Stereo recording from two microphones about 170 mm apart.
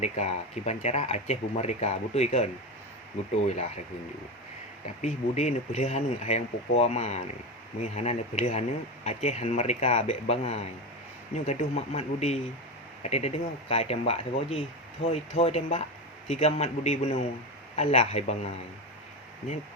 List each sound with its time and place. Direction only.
0.0 s speech: 40° left (ahead or behind)
5.0 s speech: 40° left (ahead or behind)